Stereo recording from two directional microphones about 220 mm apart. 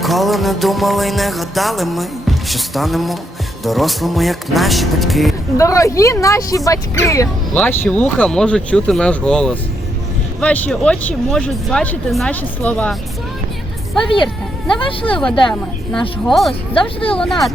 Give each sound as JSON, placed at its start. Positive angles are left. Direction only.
{"t": 0.0, "sound": "music", "side_deg": 0}
{"t": 5.5, "sound": "speech", "side_deg": 15}
{"t": 7.1, "sound": "music", "side_deg": 10}
{"t": 14.8, "sound": "speech", "side_deg": 25}
{"t": 15.1, "sound": "music", "side_deg": 5}
{"t": 16.7, "sound": "speech", "side_deg": 25}
{"t": 17.2, "sound": "music", "side_deg": 0}